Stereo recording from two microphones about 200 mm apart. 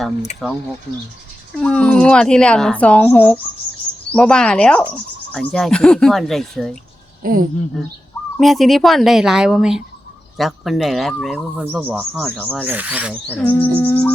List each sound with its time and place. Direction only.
0.4 s speech: centre (ahead or behind)
7.2 s speech: 45° right (ahead or behind)
8.4 s speech: centre (ahead or behind)
11.8 s owl: 10° right (ahead or behind)
12.1 s speech: 5° left (ahead or behind)
12.6 s owl: 10° right (ahead or behind)
13.2 s bird: 10° left (ahead or behind)